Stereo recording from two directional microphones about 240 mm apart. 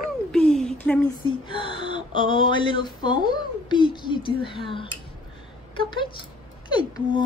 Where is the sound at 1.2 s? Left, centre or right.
Left.